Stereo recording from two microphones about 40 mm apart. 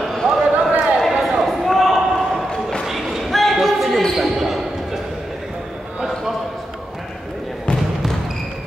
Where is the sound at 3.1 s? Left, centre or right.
Centre.